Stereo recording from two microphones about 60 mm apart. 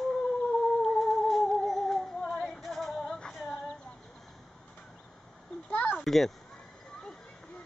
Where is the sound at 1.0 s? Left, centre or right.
Centre.